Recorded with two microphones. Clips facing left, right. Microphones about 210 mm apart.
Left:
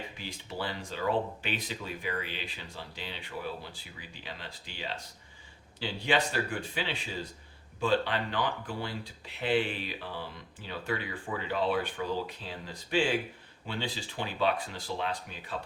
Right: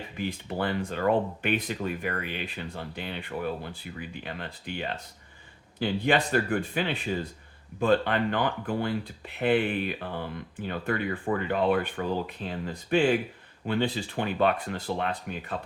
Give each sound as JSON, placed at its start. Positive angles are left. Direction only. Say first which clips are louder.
{"t": 0.2, "sound": "speech", "louder": "right 9 dB", "side_deg": -55}